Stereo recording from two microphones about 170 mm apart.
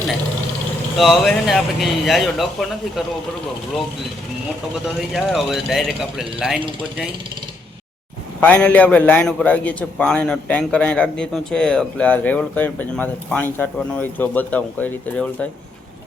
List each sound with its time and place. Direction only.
0.9 s speech: centre (ahead or behind)
5.1 s speech: centre (ahead or behind)
8.4 s a man's voice: 10° left (ahead or behind)